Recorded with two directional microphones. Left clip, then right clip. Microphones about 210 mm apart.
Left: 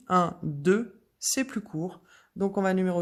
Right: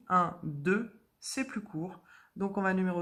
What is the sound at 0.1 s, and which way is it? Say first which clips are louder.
Speech: left 3 dB; 55° left (ahead or behind).